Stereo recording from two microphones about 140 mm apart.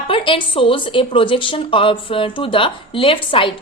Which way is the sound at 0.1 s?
40° left (ahead or behind).